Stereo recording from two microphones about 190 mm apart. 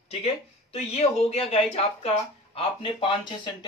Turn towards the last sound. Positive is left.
turn(degrees=25)  # may be behind; listen again after turning